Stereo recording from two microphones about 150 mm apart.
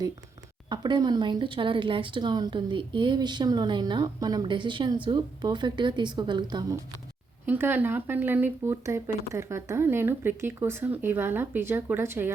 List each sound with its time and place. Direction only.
0.7 s a woman's voice: 30° right (ahead or behind)
7.4 s speech: 15° right (ahead or behind)